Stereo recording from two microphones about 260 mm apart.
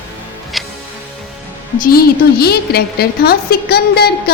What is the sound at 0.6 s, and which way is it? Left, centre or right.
Music, centre.